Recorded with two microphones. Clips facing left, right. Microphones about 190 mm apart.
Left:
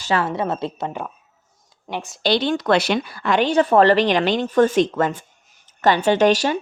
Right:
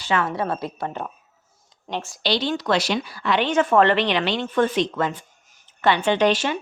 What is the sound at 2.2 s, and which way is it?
Speech, 50° left (ahead or behind).